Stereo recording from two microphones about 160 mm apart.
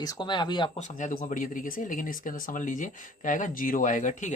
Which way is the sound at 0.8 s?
50° left (ahead or behind).